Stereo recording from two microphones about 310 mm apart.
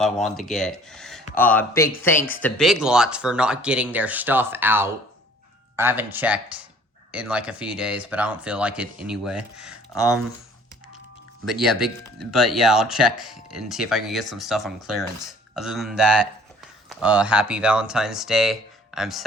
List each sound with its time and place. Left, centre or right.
0.0 s speech: centre
11.6 s speech: centre